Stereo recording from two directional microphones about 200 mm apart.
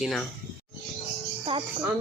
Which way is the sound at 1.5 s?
30° right (ahead or behind).